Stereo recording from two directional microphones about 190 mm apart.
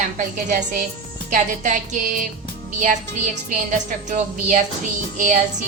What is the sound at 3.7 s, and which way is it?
A woman's voice, 45° right (ahead or behind).